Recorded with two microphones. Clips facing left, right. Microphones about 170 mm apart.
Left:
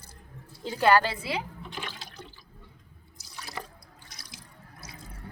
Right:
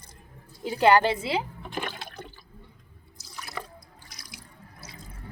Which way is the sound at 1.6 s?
55° right (ahead or behind).